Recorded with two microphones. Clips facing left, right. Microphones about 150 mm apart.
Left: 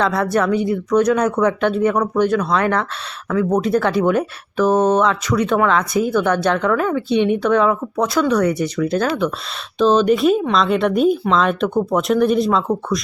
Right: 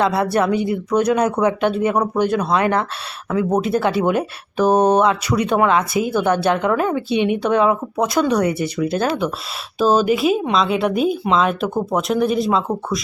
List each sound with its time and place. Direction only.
0.0 s a woman's voice: 10° right (ahead or behind)